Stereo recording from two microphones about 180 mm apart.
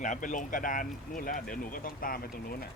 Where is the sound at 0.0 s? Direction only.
45° left (ahead or behind).